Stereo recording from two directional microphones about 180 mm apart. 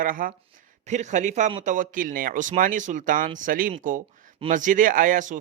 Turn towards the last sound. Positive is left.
turn(degrees=-45)  # may be behind; listen again after turning